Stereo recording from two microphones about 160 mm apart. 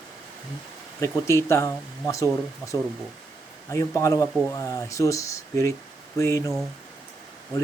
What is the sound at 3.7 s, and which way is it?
Speech, 20° left (ahead or behind).